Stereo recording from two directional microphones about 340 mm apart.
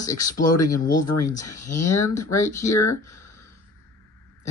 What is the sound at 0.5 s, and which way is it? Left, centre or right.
Speech, left.